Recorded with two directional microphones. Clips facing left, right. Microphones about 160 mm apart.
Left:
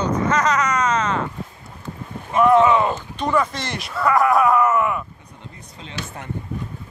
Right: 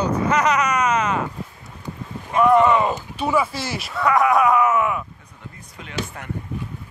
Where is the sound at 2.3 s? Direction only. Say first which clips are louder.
Left 1 dB; centre (ahead or behind).